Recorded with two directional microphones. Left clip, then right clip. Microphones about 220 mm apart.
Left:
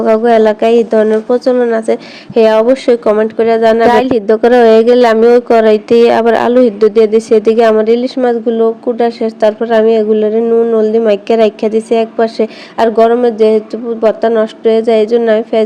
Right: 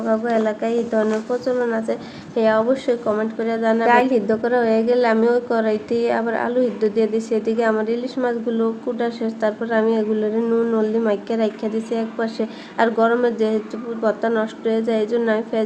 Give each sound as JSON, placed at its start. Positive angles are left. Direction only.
{"t": 0.0, "sound": "a woman's voice", "side_deg": 40}